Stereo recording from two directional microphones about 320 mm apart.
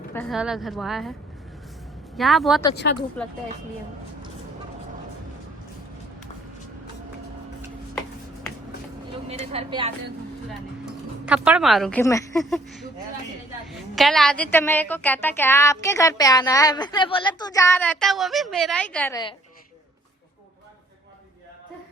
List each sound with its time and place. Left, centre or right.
0.1 s a woman's voice: centre
2.1 s a woman's voice: centre
2.8 s speech: left
9.2 s speech: centre
11.3 s a woman's voice: centre